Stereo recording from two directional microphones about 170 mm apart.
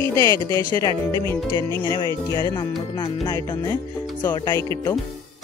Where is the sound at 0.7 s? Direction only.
20° left (ahead or behind).